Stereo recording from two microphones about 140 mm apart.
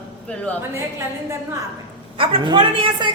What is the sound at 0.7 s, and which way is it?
Speech, 20° right (ahead or behind).